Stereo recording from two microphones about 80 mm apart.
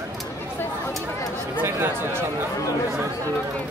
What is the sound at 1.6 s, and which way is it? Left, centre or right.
Speech, right.